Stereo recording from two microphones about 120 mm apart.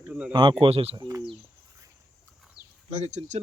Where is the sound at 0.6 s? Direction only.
55° right (ahead or behind).